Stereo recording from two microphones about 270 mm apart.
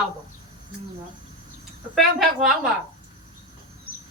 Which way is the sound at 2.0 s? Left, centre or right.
Centre.